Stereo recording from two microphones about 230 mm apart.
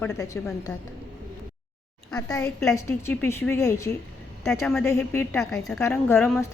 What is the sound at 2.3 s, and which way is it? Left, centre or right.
A woman's voice, centre.